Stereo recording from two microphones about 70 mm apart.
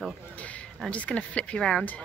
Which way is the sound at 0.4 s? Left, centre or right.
Left.